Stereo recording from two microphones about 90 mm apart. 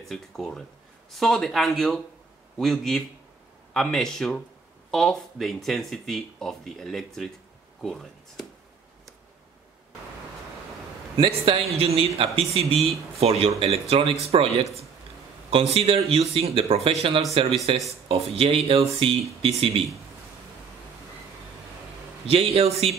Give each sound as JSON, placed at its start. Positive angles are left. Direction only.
{"t": 0.0, "sound": "a man's voice", "side_deg": 0}
{"t": 11.1, "sound": "speech", "side_deg": -85}
{"t": 15.5, "sound": "speech", "side_deg": -90}
{"t": 22.2, "sound": "speech", "side_deg": -90}